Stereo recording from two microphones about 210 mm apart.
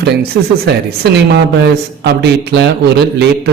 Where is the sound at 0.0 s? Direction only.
50° right (ahead or behind).